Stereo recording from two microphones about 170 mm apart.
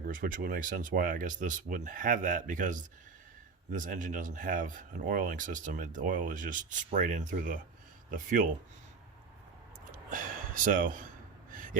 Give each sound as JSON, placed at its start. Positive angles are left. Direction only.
{"t": 0.0, "sound": "speech", "side_deg": -55}
{"t": 9.9, "sound": "gasp", "side_deg": -55}